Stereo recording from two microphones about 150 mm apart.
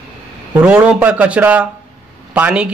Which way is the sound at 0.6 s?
10° right (ahead or behind).